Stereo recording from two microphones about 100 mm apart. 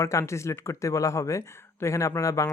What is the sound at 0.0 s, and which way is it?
Speech, 30° left (ahead or behind).